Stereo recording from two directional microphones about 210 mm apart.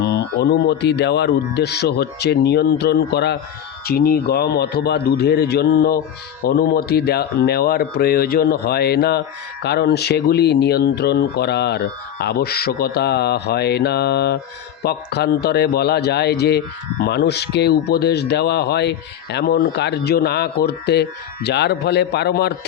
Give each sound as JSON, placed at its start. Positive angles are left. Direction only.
{"t": 0.0, "sound": "speech", "side_deg": 55}